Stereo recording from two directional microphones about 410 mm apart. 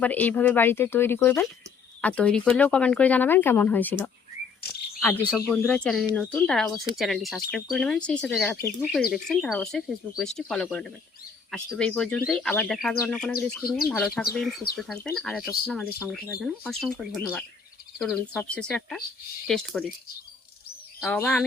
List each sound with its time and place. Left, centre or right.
0.0 s speech: centre
5.0 s speech: centre
21.0 s speech: centre